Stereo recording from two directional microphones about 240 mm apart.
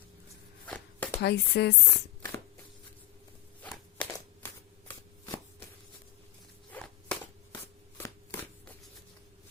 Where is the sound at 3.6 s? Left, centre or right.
Centre.